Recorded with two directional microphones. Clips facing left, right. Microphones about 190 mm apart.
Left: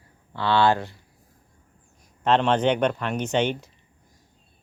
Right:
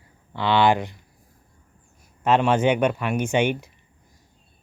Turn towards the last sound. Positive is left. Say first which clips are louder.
# right 2 dB
turn(degrees=-10)  # may be behind; listen again after turning